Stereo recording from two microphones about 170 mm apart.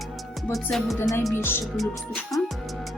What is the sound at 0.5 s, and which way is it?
Music, centre (ahead or behind).